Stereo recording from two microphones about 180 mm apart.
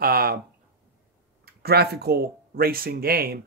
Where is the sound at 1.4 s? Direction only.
60° right (ahead or behind).